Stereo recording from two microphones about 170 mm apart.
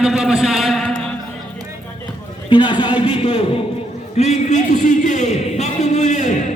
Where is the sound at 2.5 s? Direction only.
30° left (ahead or behind).